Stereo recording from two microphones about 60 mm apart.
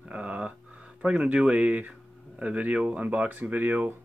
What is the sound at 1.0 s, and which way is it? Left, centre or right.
Speech, centre.